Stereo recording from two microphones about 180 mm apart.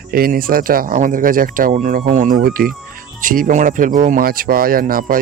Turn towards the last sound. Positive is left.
turn(degrees=-55)  # may be behind; listen again after turning